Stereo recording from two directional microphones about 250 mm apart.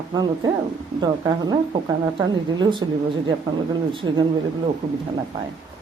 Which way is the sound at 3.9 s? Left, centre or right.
Centre.